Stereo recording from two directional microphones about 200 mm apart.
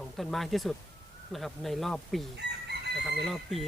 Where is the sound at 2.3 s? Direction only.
55° right (ahead or behind).